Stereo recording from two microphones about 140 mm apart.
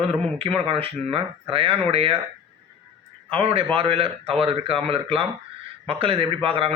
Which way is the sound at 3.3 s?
40° right (ahead or behind).